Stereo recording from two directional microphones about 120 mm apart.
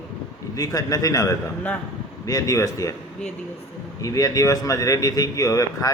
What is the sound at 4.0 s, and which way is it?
Speech, 30° left (ahead or behind).